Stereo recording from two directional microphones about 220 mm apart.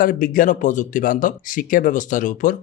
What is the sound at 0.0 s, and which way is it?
Speech, 40° left (ahead or behind).